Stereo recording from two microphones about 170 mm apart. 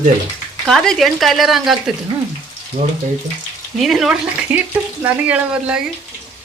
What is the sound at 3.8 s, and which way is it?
Speech, centre (ahead or behind).